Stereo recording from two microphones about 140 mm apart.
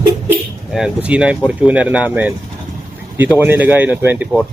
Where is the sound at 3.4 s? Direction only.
15° right (ahead or behind).